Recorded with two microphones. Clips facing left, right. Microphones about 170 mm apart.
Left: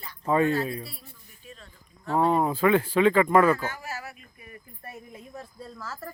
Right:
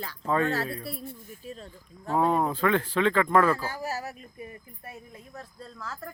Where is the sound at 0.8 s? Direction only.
50° right (ahead or behind).